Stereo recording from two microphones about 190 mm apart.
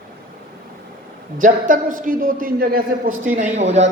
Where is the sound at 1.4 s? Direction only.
45° right (ahead or behind).